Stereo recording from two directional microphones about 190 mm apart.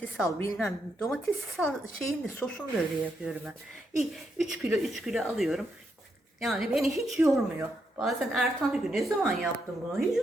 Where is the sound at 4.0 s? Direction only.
Centre (ahead or behind).